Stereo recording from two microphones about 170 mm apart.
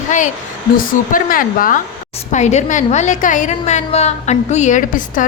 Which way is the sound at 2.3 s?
40° left (ahead or behind).